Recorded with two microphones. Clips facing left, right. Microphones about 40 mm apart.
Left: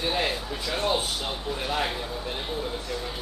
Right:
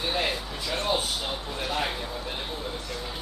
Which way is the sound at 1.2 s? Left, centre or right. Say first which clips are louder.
Left 1 dB; centre.